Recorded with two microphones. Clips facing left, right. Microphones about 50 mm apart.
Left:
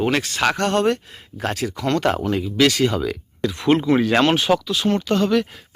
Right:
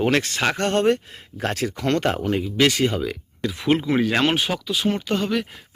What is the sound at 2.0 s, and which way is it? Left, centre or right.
Speech, left.